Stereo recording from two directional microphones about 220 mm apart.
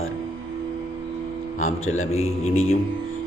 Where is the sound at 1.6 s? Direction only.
70° left (ahead or behind).